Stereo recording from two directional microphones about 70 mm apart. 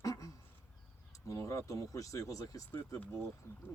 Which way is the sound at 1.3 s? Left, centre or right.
Left.